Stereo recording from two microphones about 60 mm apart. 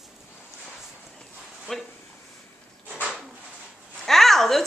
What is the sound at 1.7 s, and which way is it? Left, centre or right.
Speech, centre.